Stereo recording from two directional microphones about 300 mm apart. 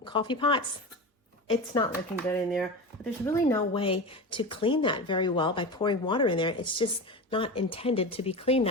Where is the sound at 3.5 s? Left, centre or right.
Centre.